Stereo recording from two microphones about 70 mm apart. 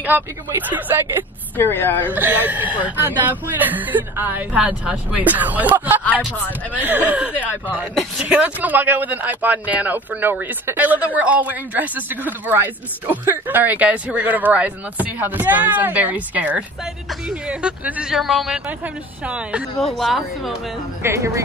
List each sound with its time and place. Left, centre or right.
0.1 s speech: right
1.6 s a woman's voice: left
2.1 s speech: right
7.6 s speech: centre
8.2 s speech: centre
18.1 s speech: centre
19.2 s speech: centre
20.0 s speech: centre
21.0 s speech: right